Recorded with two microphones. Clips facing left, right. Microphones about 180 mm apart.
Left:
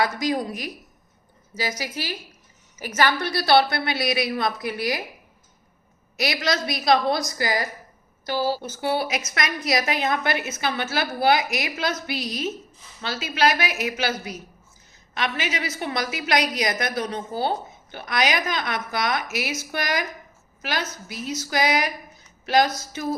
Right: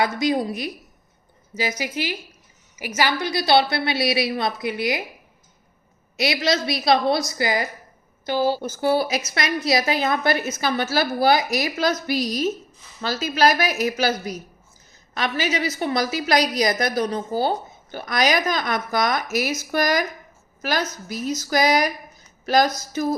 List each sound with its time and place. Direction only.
0.0 s a woman's voice: 25° right (ahead or behind)
1.8 s a woman's voice: 20° right (ahead or behind)
6.1 s a woman's voice: 25° right (ahead or behind)
8.6 s a woman's voice: 40° right (ahead or behind)